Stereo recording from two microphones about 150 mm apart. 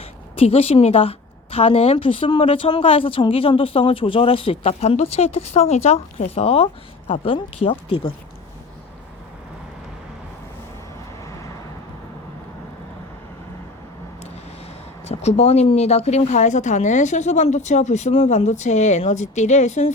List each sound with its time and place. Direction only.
0.3 s a woman's voice: 40° left (ahead or behind)
15.0 s speech: 45° left (ahead or behind)